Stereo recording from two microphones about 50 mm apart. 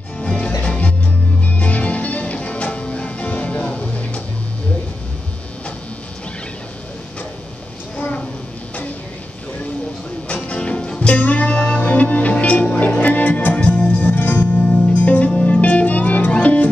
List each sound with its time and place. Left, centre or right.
0.2 s music: left
8.0 s a sound: left
10.2 s music: left
14.7 s music: left